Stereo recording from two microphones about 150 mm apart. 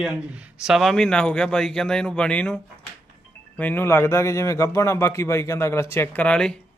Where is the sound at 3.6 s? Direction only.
10° left (ahead or behind).